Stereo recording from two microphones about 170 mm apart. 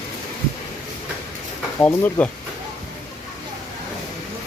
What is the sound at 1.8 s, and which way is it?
Speech, 10° left (ahead or behind).